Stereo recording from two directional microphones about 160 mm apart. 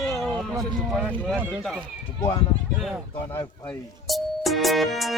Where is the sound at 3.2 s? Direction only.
15° left (ahead or behind).